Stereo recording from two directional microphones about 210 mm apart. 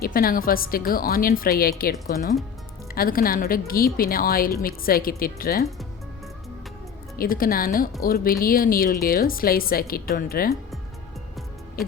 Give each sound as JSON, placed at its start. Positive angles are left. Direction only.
{"t": 0.0, "sound": "a woman's voice", "side_deg": 45}
{"t": 7.2, "sound": "a woman's voice", "side_deg": 45}